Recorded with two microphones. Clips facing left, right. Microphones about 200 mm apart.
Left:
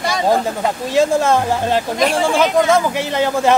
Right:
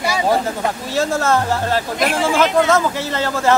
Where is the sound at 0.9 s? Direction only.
15° left (ahead or behind).